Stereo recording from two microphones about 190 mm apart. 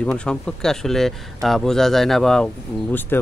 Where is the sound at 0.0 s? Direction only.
5° left (ahead or behind).